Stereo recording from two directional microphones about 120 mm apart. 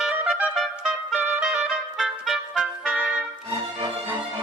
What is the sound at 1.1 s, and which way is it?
Music, 5° right (ahead or behind).